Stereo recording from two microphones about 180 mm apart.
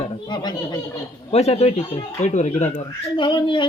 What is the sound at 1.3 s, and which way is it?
Speech, 35° left (ahead or behind).